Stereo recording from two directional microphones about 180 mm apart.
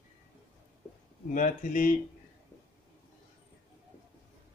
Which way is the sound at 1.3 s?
45° left (ahead or behind).